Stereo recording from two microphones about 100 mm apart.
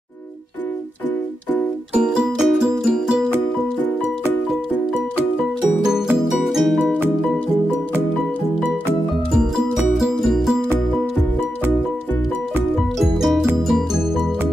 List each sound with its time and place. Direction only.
2.0 s music: 5° right (ahead or behind)
4.0 s music: 25° left (ahead or behind)
5.9 s music: 5° right (ahead or behind)
9.9 s music: 5° right (ahead or behind)
13.2 s music: 5° right (ahead or behind)